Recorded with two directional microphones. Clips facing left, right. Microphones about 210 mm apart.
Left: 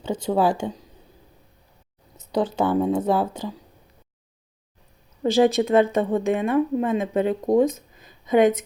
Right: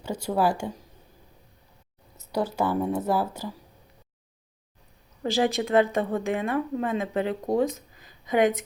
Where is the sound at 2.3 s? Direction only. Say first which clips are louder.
Left 4 dB; 20° left (ahead or behind).